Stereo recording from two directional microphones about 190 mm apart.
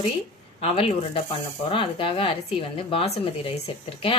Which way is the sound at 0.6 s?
30° left (ahead or behind).